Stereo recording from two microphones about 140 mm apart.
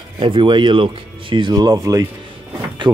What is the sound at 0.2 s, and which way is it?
Speech, 35° right (ahead or behind).